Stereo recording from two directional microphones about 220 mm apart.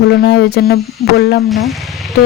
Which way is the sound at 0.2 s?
50° left (ahead or behind).